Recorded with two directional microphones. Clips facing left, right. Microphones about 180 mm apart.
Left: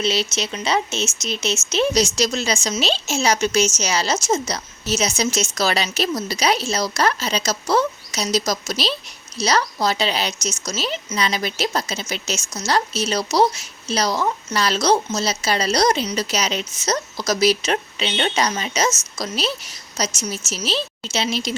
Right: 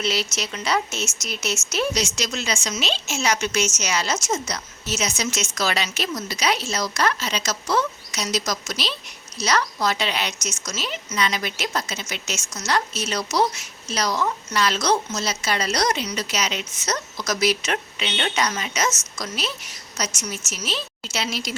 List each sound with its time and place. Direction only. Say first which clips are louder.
0.0 s speech: left 4 dB; 25° left (ahead or behind)
1.9 s speech: left 6 dB; 35° left (ahead or behind)